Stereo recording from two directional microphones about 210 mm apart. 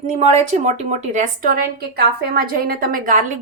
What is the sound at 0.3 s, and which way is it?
A woman's voice, 35° right (ahead or behind).